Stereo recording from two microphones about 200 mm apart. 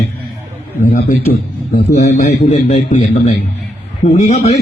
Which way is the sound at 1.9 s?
50° left (ahead or behind).